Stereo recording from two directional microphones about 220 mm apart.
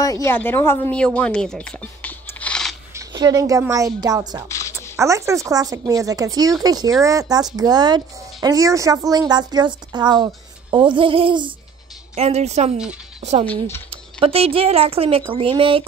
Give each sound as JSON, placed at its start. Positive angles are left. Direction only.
{"t": 0.0, "sound": "speech", "side_deg": 15}
{"t": 2.9, "sound": "a woman's voice", "side_deg": -15}
{"t": 4.5, "sound": "a sound", "side_deg": 15}
{"t": 4.9, "sound": "a woman's voice", "side_deg": -15}